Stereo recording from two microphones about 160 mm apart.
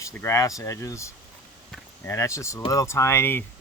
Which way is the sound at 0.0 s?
15° left (ahead or behind).